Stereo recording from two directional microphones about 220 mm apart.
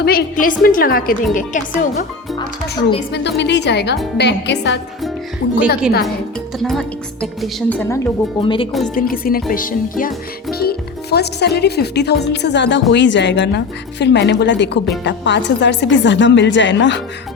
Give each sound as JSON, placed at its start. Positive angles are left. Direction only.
{"t": 0.0, "sound": "a woman's voice", "side_deg": 40}
{"t": 2.7, "sound": "speech", "side_deg": 50}
{"t": 6.6, "sound": "a woman's voice", "side_deg": 0}
{"t": 8.4, "sound": "speech", "side_deg": 25}
{"t": 9.0, "sound": "a woman's voice", "side_deg": 40}